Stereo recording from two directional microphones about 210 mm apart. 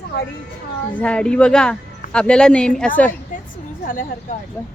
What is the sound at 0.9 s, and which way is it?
Speech, 5° left (ahead or behind).